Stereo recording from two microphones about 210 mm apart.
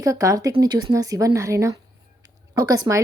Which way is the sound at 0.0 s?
15° right (ahead or behind).